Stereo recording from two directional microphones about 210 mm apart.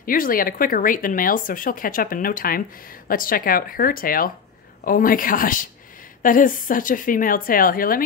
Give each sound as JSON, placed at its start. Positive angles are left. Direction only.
{"t": 0.0, "sound": "a woman's voice", "side_deg": 40}